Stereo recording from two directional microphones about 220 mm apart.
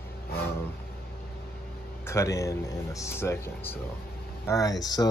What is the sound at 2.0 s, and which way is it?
Speech, 15° left (ahead or behind).